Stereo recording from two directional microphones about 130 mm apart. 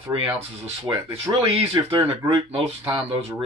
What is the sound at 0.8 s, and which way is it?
Speech, 20° right (ahead or behind).